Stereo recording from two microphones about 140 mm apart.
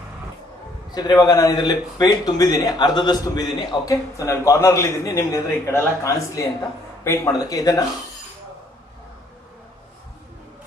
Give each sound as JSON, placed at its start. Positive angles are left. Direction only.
{"t": 0.9, "sound": "a man's voice", "side_deg": 30}